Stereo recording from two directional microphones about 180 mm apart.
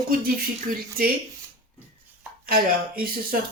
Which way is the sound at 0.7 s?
55° right (ahead or behind).